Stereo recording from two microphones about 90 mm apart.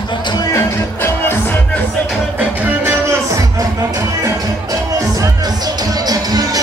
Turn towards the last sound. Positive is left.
turn(degrees=-45)  # may be behind; listen again after turning